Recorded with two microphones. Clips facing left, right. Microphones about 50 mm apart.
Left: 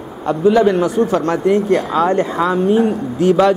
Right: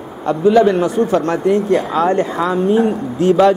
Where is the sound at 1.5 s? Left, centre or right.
Left.